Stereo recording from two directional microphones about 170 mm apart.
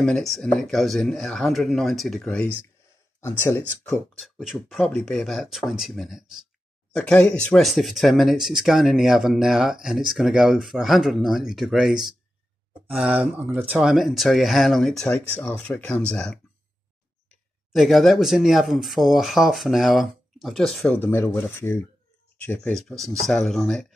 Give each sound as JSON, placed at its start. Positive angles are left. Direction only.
{"t": 0.0, "sound": "speech", "side_deg": 0}
{"t": 4.2, "sound": "speech", "side_deg": 0}
{"t": 17.7, "sound": "speech", "side_deg": 0}